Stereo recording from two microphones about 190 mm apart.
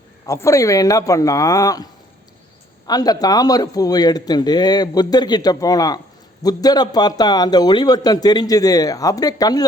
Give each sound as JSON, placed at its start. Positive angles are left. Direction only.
{"t": 0.3, "sound": "a man's voice", "side_deg": 15}